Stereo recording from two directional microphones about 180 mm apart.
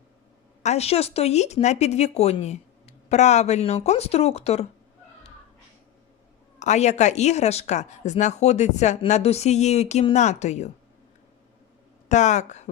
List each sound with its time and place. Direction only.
0.6 s speech: 35° left (ahead or behind)
6.6 s speech: 40° left (ahead or behind)
12.0 s speech: 40° left (ahead or behind)